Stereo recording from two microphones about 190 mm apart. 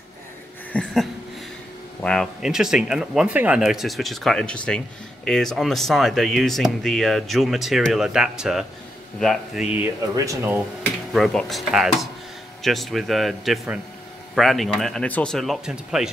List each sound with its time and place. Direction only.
0.7 s a sound: 5° left (ahead or behind)
2.0 s speech: 5° left (ahead or behind)
10.1 s speech: 15° right (ahead or behind)
11.1 s speech: centre (ahead or behind)